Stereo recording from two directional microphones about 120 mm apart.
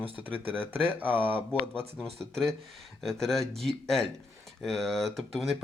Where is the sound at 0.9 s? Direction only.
15° right (ahead or behind).